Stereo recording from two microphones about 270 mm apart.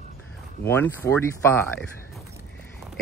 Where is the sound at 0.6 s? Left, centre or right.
Centre.